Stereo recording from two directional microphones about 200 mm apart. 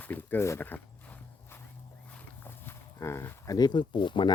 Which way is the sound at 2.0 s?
10° left (ahead or behind).